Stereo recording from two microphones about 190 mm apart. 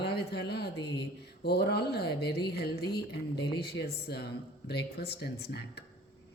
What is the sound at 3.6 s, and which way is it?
A woman's voice, 55° left (ahead or behind).